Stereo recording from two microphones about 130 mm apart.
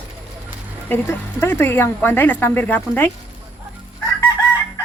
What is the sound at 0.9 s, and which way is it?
Speech, 20° left (ahead or behind).